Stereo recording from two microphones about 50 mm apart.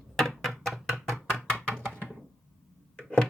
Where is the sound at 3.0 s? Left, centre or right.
Centre.